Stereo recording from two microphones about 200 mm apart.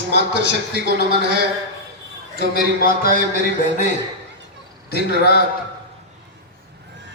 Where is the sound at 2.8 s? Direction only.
45° left (ahead or behind).